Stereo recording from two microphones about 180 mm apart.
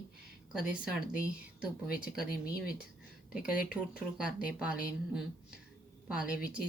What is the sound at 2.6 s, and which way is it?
Speech, 55° left (ahead or behind).